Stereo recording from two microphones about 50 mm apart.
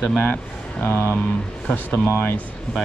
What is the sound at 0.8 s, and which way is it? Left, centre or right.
Speech, left.